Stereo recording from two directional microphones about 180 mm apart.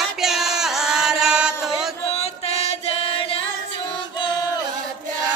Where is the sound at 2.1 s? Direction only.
35° left (ahead or behind).